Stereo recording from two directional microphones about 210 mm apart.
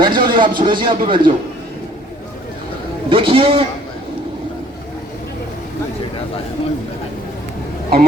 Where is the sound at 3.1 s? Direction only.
25° right (ahead or behind).